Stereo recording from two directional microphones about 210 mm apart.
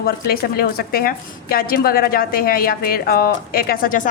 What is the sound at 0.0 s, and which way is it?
A woman's voice, 45° left (ahead or behind).